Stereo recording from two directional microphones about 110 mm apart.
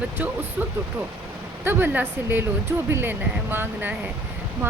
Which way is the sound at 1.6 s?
20° right (ahead or behind).